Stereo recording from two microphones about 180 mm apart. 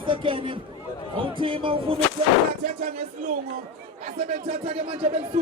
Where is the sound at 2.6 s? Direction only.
55° right (ahead or behind).